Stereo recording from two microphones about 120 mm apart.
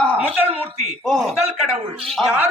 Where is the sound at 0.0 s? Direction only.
10° left (ahead or behind).